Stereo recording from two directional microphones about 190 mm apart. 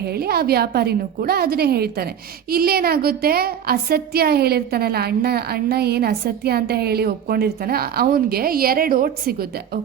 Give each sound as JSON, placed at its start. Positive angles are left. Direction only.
{"t": 0.0, "sound": "a woman's voice", "side_deg": -55}